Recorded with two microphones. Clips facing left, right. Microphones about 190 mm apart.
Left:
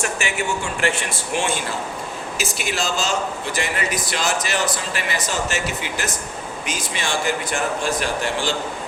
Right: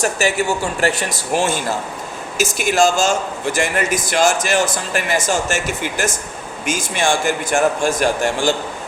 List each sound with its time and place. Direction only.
0.0 s a man's voice: 40° right (ahead or behind)